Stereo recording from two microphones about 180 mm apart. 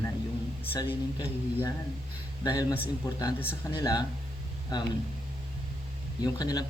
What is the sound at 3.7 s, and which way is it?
Speech, 20° left (ahead or behind).